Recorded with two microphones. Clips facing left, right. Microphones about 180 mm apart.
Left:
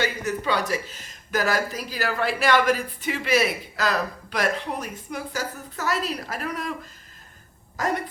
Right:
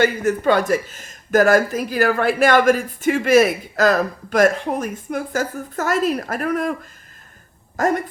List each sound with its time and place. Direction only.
0.0 s speech: 50° right (ahead or behind)
7.8 s speech: 50° right (ahead or behind)